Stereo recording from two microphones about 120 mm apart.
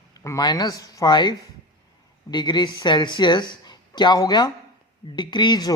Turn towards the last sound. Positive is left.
turn(degrees=35)  # may be behind; listen again after turning